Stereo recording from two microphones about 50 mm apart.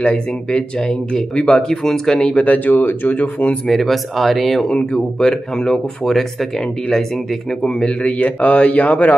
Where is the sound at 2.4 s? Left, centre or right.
Left.